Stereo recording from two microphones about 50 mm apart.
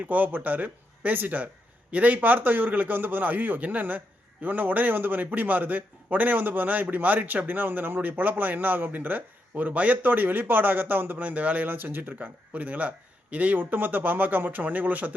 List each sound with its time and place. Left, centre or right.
0.1 s a man's voice: right